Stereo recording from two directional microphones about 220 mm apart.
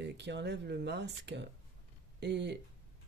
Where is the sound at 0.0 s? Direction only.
50° right (ahead or behind).